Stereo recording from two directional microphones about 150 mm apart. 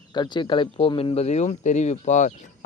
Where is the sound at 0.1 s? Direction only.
30° left (ahead or behind).